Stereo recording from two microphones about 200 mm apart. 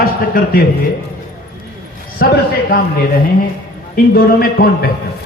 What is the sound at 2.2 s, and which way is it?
Speech, 50° left (ahead or behind).